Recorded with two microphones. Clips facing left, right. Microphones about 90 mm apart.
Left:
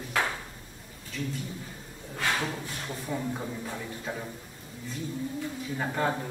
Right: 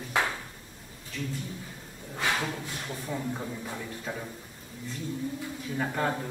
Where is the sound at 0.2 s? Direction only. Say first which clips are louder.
Right 1 dB; 20° right (ahead or behind).